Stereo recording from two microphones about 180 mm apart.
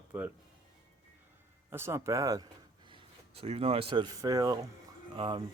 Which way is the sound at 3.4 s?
30° right (ahead or behind).